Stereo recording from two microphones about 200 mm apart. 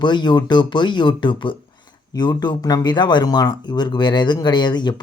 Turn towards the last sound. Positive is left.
turn(degrees=20)  # may be behind; listen again after turning